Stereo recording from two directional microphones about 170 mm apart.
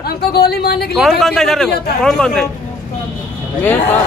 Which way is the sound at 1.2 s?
Centre (ahead or behind).